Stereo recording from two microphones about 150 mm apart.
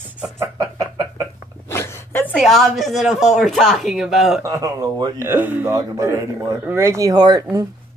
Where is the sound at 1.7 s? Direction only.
15° left (ahead or behind).